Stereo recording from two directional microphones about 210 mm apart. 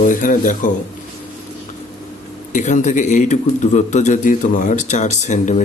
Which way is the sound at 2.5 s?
35° left (ahead or behind).